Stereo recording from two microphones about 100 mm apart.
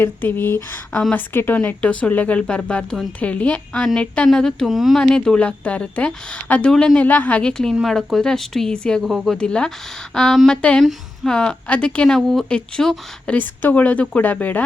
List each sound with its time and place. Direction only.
0.0 s a woman's voice: 20° left (ahead or behind)
7.5 s a woman's voice: 5° left (ahead or behind)